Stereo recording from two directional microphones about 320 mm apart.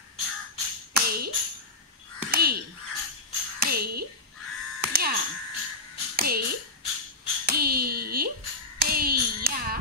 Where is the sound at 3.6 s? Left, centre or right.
Right.